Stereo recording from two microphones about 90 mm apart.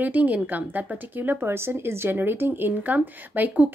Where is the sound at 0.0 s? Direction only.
15° right (ahead or behind).